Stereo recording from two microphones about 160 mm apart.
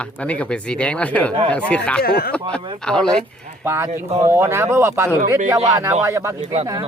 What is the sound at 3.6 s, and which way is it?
Speech, 15° right (ahead or behind).